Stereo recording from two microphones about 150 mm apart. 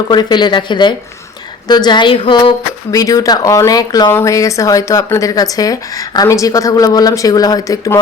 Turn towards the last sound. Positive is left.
turn(degrees=20)  # may be behind; listen again after turning